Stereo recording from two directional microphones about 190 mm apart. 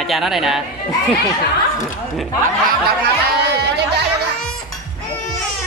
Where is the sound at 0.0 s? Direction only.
Centre (ahead or behind).